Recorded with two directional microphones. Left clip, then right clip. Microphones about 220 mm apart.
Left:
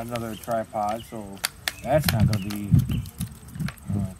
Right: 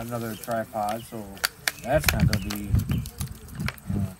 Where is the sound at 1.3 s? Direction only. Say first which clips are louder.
Right 2 dB; 20° right (ahead or behind).